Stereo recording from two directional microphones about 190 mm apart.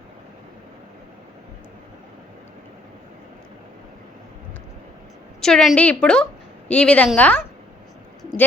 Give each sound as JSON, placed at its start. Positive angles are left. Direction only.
{"t": 5.4, "sound": "a woman's voice", "side_deg": 0}